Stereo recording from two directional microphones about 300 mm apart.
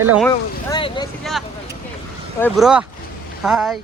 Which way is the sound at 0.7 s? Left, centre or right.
Centre.